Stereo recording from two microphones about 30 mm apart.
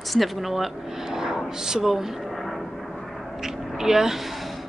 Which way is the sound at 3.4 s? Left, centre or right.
Centre.